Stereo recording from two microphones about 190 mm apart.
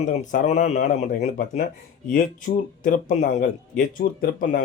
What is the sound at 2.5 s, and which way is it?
Speech, 45° left (ahead or behind).